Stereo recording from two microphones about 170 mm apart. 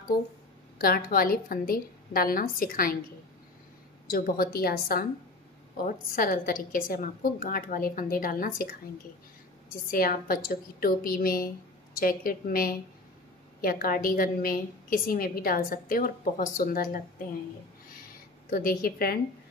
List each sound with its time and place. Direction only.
0.7 s a woman's voice: 60° left (ahead or behind)
4.1 s a woman's voice: 60° left (ahead or behind)
9.8 s a woman's voice: 60° left (ahead or behind)
18.5 s a woman's voice: 60° left (ahead or behind)